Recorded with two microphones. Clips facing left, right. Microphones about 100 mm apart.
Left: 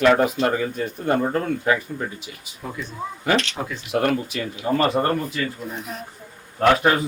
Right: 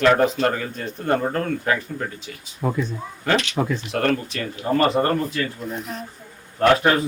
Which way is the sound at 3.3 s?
10° left (ahead or behind).